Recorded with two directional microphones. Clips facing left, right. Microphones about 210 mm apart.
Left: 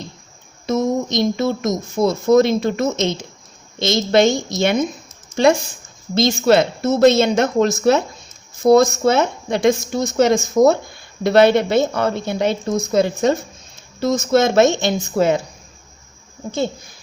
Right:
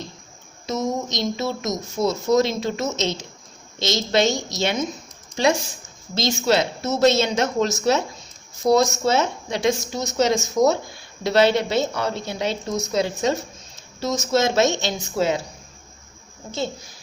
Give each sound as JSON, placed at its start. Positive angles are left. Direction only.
{"t": 0.7, "sound": "speech", "side_deg": 55}